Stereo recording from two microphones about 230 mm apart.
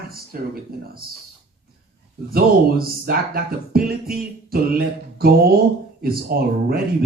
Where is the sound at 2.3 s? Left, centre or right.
Right.